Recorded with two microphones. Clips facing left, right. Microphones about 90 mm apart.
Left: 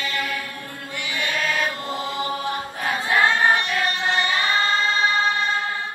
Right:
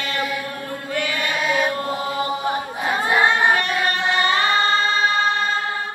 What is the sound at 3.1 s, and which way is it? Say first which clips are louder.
Choir: right 1 dB; 15° right (ahead or behind).